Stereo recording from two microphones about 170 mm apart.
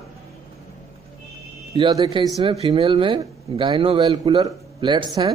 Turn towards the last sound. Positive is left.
turn(degrees=-30)  # may be behind; listen again after turning